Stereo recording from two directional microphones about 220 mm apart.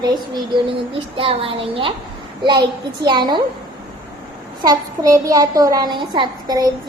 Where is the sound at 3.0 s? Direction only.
20° right (ahead or behind).